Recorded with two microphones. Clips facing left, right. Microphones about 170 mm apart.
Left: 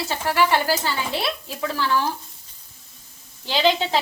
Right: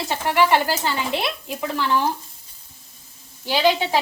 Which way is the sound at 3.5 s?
10° right (ahead or behind).